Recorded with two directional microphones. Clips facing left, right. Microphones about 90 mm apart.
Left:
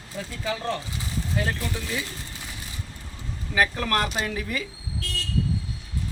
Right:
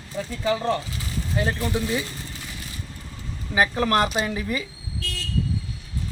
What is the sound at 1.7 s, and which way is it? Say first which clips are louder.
Speech: right 6 dB; 15° right (ahead or behind).